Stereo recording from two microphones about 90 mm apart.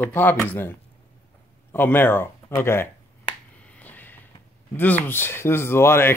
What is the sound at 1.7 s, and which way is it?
Speech, 25° left (ahead or behind).